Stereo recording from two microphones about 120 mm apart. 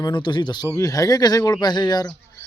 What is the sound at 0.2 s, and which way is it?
Speech, 40° left (ahead or behind).